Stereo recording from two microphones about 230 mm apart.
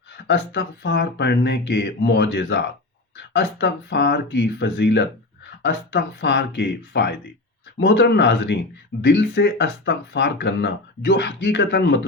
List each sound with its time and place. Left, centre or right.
0.3 s speech: left